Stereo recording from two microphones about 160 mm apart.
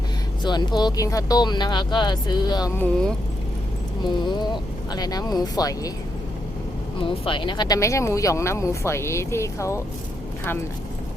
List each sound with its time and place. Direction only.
0.4 s speech: 25° left (ahead or behind)
2.7 s speech: 5° left (ahead or behind)
4.1 s speech: 30° left (ahead or behind)
7.0 s speech: 30° left (ahead or behind)